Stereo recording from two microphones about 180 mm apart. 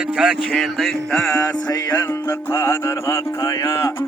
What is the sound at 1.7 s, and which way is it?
Music, 20° left (ahead or behind).